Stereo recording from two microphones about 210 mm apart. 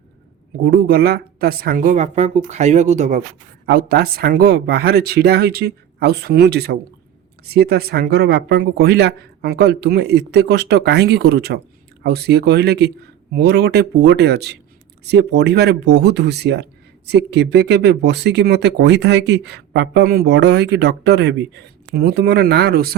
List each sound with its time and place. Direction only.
0.6 s speech: 50° right (ahead or behind); by 3.2 s 35° right (ahead or behind)
3.7 s speech: 45° right (ahead or behind)